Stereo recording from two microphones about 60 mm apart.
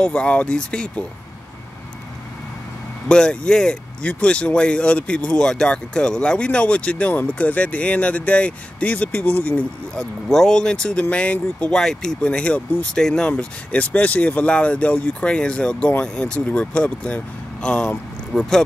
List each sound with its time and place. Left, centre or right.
0.0 s speech: centre
3.1 s speech: centre
9.9 s speech: centre; by 11.7 s left
11.7 s speech: centre
13.3 s speech: left